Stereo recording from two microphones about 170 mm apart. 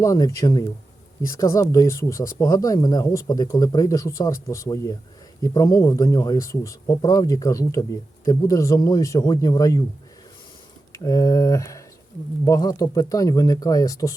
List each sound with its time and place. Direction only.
0.0 s speech: 20° left (ahead or behind)
10.9 s speech: 20° left (ahead or behind)